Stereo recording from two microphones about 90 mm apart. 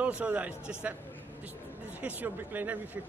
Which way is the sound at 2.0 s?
20° right (ahead or behind).